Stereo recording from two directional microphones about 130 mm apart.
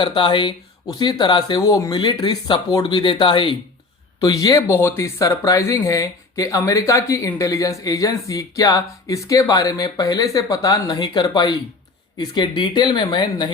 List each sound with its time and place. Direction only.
0.0 s speech: 40° left (ahead or behind)
4.2 s speech: 25° left (ahead or behind)